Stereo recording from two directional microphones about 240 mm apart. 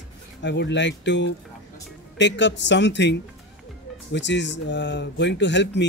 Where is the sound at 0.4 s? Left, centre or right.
Left.